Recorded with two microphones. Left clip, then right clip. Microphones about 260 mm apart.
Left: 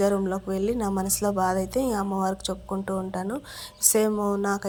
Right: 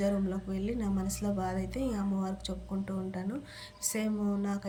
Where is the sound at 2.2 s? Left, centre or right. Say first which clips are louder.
Left 11 dB; left.